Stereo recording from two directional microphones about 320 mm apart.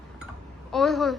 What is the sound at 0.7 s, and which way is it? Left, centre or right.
Speech, centre.